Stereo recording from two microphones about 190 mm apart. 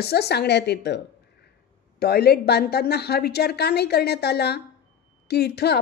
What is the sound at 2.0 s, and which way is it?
Speech, 55° left (ahead or behind).